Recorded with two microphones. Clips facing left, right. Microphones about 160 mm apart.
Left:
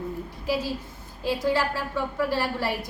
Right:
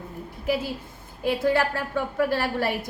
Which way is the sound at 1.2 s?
55° right (ahead or behind).